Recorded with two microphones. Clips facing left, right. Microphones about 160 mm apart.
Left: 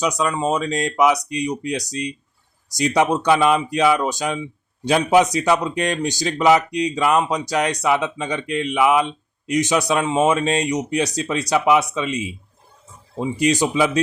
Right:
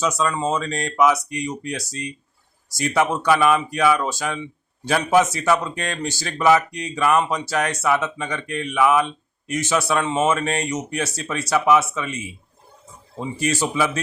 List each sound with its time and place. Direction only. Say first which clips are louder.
0.0 s speech: left 1 dB; 15° left (ahead or behind)